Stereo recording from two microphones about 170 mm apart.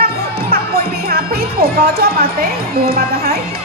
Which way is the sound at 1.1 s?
65° right (ahead or behind).